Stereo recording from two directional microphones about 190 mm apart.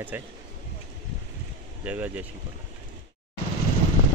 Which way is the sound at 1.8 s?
10° right (ahead or behind).